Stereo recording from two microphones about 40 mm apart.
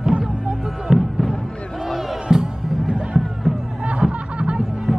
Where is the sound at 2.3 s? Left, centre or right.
Centre.